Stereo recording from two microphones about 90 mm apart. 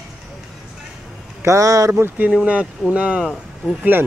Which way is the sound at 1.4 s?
35° right (ahead or behind).